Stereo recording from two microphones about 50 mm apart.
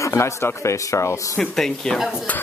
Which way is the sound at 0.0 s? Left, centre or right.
Left.